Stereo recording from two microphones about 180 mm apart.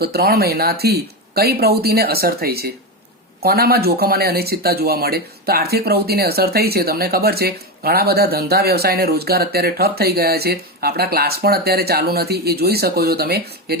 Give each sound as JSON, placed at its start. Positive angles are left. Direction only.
{"t": 0.0, "sound": "speech", "side_deg": -60}